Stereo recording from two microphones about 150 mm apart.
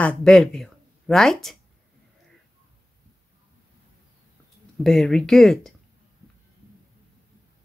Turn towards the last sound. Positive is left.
turn(degrees=5)  # may be behind; listen again after turning